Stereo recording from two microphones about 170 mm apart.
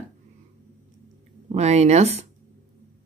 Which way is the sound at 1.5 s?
40° right (ahead or behind).